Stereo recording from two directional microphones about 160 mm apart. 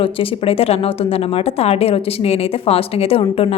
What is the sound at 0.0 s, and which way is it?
A woman's voice, 35° left (ahead or behind).